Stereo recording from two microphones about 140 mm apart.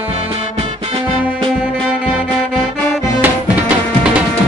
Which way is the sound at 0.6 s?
40° right (ahead or behind).